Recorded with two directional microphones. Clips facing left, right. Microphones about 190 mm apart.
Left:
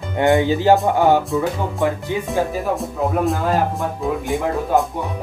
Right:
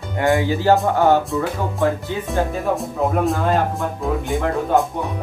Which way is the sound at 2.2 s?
Centre (ahead or behind).